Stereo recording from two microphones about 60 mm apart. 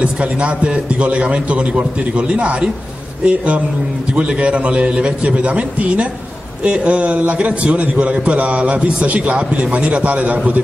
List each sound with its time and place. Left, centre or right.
0.0 s a man's voice: centre